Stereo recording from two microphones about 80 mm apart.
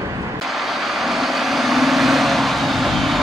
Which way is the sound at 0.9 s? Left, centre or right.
Centre.